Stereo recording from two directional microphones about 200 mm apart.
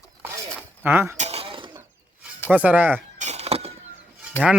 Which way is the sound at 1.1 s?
30° right (ahead or behind).